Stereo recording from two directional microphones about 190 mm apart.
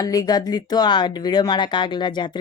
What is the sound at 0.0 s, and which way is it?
Speech, 20° left (ahead or behind).